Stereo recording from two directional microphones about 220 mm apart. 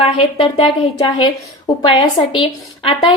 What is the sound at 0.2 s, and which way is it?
A woman's voice, 25° left (ahead or behind).